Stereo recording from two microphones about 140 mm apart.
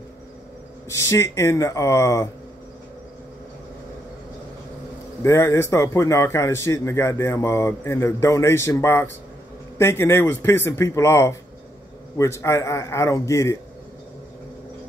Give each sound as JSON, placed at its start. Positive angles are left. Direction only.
{"t": 0.8, "sound": "speech", "side_deg": 20}
{"t": 5.2, "sound": "speech", "side_deg": 20}